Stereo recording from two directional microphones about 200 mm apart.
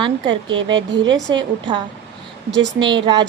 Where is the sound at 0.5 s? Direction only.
70° right (ahead or behind).